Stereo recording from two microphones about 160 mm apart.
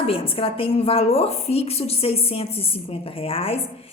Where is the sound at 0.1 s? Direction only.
35° left (ahead or behind).